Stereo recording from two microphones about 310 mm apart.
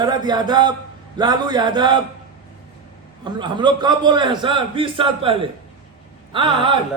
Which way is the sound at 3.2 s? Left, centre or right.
Centre.